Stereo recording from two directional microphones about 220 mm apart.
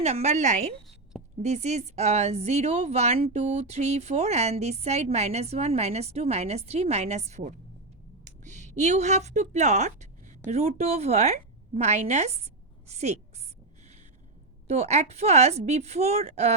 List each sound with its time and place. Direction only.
0.0 s a woman's voice: 30° right (ahead or behind)
14.7 s speech: 30° right (ahead or behind)